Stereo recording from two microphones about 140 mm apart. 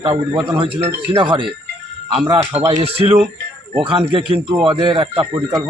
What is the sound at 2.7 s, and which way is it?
Speech, 45° right (ahead or behind).